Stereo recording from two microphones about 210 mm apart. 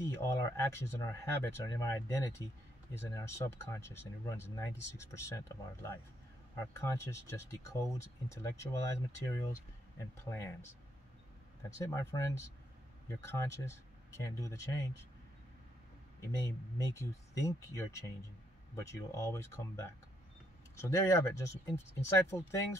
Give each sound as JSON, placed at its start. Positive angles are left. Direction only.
{"t": 0.1, "sound": "speech", "side_deg": 15}
{"t": 11.8, "sound": "speech", "side_deg": 15}
{"t": 16.2, "sound": "speech", "side_deg": 15}